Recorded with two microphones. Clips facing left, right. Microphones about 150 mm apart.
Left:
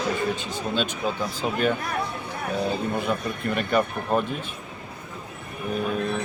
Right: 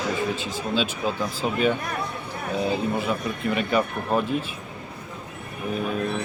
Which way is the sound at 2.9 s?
Centre (ahead or behind).